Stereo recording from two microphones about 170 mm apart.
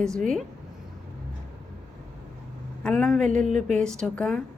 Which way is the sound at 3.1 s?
45° right (ahead or behind).